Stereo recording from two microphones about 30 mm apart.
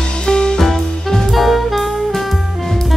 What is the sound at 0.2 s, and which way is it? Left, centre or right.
Music, left.